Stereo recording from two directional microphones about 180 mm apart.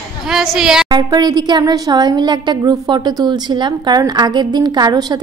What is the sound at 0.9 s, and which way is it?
A woman's voice, 20° right (ahead or behind).